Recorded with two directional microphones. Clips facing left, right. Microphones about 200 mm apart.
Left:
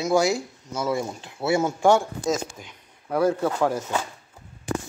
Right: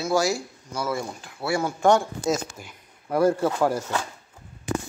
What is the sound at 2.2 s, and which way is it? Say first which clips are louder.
Speech: even; 5° right (ahead or behind).